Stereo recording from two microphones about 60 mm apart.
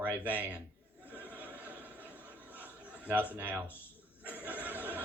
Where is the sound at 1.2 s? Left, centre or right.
Right.